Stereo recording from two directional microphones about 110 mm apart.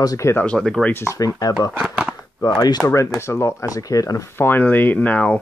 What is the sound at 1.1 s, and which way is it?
Speech, 30° left (ahead or behind).